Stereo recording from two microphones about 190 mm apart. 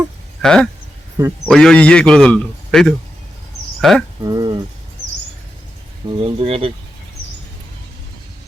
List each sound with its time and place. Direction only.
0.4 s a man's voice: 5° left (ahead or behind)
4.2 s speech: 20° right (ahead or behind)
6.1 s speech: 30° right (ahead or behind)